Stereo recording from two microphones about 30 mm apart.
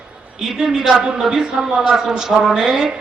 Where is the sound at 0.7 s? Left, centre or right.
Centre.